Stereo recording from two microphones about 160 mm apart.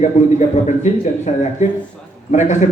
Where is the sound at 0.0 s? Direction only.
50° left (ahead or behind).